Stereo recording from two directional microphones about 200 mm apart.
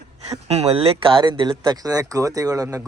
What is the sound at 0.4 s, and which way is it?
A man's voice, 30° right (ahead or behind).